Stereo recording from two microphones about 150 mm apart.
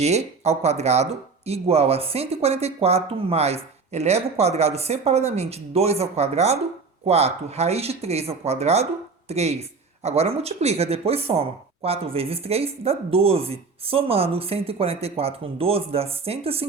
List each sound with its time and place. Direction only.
0.0 s speech: 45° right (ahead or behind)